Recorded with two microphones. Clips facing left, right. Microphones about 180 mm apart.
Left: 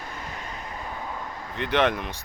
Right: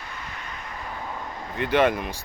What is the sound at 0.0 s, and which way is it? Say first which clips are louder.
Vehicle: left 2 dB; 45° left (ahead or behind).